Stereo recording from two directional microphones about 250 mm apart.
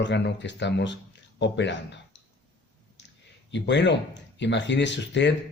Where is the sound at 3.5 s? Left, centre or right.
Left.